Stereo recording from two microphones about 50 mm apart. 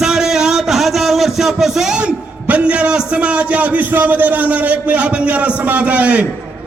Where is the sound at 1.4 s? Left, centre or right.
Centre.